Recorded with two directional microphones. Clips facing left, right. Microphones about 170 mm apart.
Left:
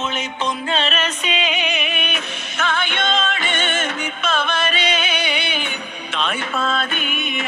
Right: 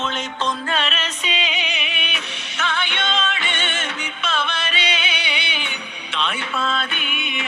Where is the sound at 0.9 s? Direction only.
55° left (ahead or behind).